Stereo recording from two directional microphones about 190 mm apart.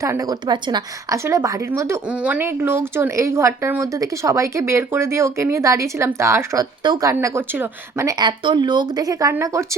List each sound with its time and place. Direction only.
0.0 s a woman's voice: 15° right (ahead or behind)